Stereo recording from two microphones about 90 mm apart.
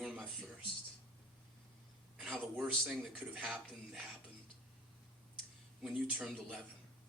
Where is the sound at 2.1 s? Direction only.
5° right (ahead or behind).